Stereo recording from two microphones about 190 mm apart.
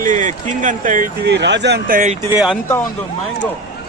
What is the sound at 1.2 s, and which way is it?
Speech, 65° right (ahead or behind).